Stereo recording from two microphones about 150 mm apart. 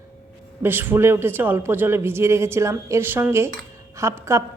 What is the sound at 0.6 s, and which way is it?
A woman's voice, 15° right (ahead or behind).